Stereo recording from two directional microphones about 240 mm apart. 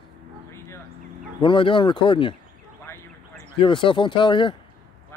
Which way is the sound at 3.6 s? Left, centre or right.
Left.